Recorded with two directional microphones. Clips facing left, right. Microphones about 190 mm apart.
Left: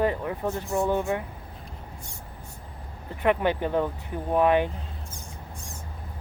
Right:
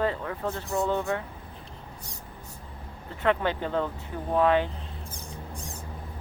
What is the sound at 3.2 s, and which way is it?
Speech, 15° left (ahead or behind).